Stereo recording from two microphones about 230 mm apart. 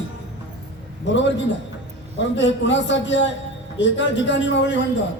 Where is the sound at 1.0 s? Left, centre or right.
Left.